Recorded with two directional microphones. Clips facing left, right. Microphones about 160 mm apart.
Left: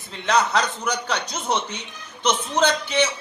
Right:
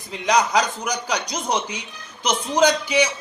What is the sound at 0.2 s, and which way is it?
Speech, 10° right (ahead or behind).